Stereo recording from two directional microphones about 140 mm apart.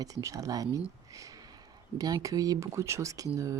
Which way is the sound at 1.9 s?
25° right (ahead or behind).